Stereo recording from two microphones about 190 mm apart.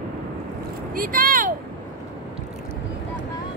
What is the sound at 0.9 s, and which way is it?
Vehicle, 50° right (ahead or behind).